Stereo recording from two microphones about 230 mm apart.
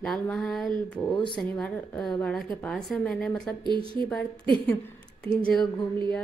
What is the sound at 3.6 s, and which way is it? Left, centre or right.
Speech, right.